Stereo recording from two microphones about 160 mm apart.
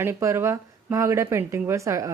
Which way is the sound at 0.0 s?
15° right (ahead or behind).